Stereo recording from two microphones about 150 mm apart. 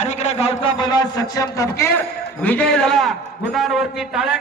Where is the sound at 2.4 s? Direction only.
10° left (ahead or behind).